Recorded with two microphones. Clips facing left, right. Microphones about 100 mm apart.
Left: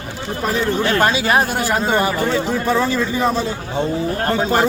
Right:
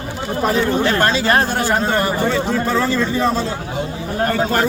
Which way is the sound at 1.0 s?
10° left (ahead or behind).